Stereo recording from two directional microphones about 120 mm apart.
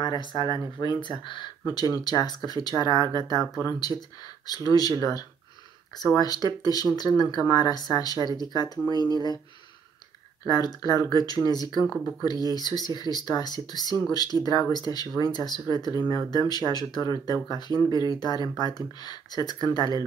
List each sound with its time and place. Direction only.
0.0 s speech: 40° left (ahead or behind)
10.4 s speech: 35° left (ahead or behind)